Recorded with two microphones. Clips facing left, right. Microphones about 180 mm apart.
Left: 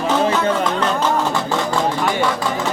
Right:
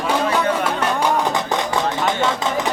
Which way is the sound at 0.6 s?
10° right (ahead or behind).